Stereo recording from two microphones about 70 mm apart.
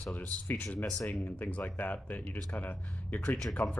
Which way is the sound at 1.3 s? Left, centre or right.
Left.